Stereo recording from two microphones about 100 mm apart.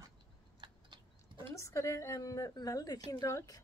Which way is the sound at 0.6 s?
55° right (ahead or behind).